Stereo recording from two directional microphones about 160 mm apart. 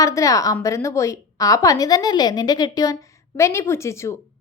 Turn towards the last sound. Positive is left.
turn(degrees=15)  # may be behind; listen again after turning